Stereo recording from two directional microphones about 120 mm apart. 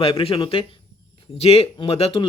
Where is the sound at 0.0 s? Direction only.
55° left (ahead or behind).